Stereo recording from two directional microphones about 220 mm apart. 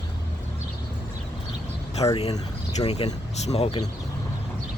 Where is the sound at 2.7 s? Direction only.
30° left (ahead or behind).